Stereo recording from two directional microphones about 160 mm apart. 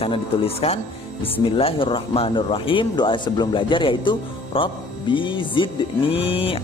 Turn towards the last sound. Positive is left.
turn(degrees=35)  # may be behind; listen again after turning